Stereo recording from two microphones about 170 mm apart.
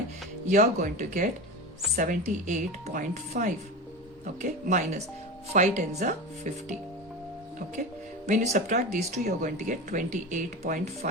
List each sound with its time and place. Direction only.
0.4 s speech: 50° right (ahead or behind)
8.3 s speech: 45° right (ahead or behind)
9.0 s speech: 40° right (ahead or behind)